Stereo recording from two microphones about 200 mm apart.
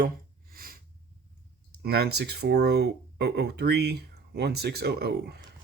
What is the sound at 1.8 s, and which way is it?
Speech, 55° right (ahead or behind).